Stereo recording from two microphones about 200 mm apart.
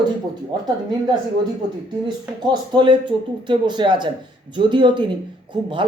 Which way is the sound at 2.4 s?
25° right (ahead or behind).